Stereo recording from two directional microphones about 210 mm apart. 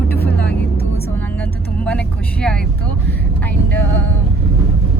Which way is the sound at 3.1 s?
10° left (ahead or behind).